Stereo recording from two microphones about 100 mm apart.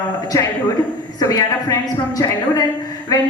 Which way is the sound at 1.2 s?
40° left (ahead or behind).